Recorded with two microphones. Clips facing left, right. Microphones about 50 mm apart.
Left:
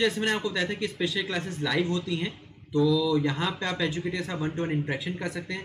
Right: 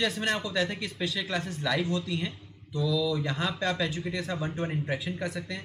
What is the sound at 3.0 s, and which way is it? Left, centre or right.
Speech, centre.